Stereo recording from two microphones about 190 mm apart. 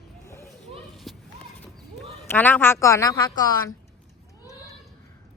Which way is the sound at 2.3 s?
10° left (ahead or behind).